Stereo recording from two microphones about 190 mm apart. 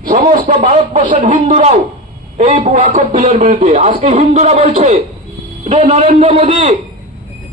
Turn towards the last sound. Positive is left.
turn(degrees=-40)  # may be behind; listen again after turning